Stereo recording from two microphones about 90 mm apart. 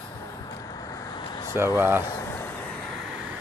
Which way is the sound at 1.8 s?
25° right (ahead or behind).